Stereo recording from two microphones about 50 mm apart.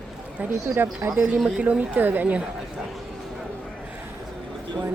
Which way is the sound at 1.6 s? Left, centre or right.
Right.